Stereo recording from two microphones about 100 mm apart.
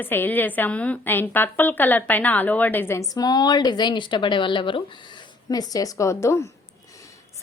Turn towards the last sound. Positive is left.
turn(degrees=30)  # may be behind; listen again after turning